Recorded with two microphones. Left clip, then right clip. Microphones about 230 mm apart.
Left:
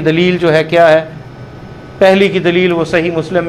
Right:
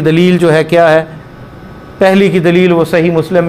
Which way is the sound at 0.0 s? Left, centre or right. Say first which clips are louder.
Right 2 dB; right.